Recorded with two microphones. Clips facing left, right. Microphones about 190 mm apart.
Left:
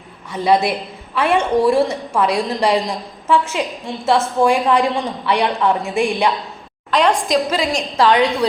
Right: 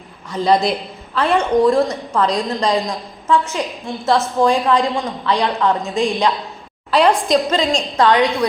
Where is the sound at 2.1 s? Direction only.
10° left (ahead or behind).